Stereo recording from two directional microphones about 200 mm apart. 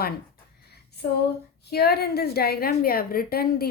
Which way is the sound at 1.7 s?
50° left (ahead or behind).